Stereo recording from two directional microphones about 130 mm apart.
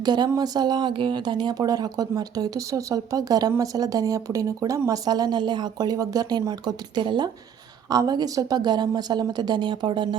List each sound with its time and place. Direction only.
0.0 s speech: 35° right (ahead or behind)